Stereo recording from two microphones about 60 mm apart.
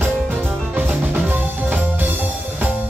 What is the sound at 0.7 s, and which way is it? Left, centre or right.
Music, right.